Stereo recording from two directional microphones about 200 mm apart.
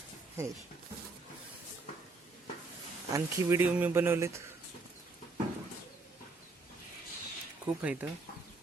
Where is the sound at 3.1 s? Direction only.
10° right (ahead or behind).